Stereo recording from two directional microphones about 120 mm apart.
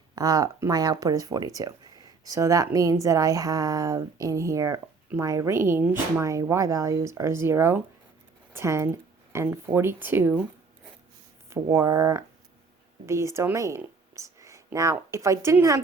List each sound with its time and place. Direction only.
0.2 s speech: 30° right (ahead or behind)
11.4 s speech: 25° right (ahead or behind)